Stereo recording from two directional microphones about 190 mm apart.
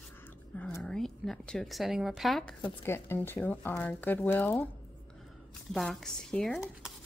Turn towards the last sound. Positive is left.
turn(degrees=0)  # may be behind; listen again after turning